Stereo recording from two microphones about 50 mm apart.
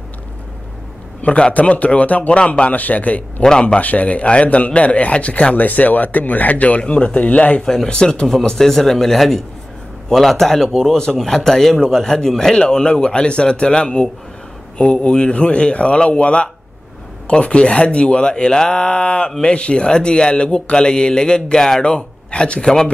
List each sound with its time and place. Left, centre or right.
1.2 s a man's voice: left
7.6 s a man's voice: centre